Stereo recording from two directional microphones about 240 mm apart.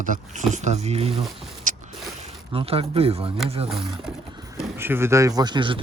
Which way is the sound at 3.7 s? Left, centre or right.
Centre.